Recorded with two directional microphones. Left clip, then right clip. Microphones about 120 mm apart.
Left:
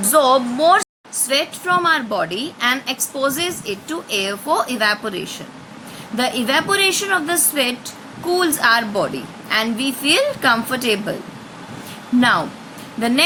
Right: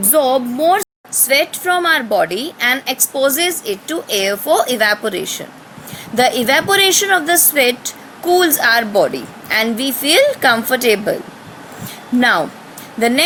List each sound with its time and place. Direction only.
0.1 s speech: 25° right (ahead or behind)
1.3 s a woman's voice: 40° right (ahead or behind)
13.0 s a woman's voice: 35° right (ahead or behind)